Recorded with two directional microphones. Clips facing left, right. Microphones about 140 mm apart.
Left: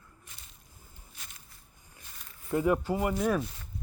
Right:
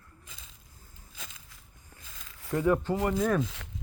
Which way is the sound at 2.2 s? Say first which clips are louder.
Right 3 dB; 90° right.